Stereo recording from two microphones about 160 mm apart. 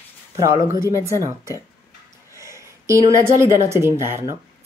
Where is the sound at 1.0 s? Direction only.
15° right (ahead or behind).